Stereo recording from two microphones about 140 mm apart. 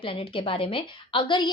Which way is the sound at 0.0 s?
40° left (ahead or behind).